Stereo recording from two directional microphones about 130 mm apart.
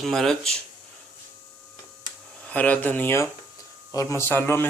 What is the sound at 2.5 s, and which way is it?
Speech, 10° left (ahead or behind).